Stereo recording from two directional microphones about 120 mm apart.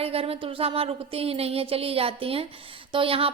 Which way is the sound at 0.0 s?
55° right (ahead or behind).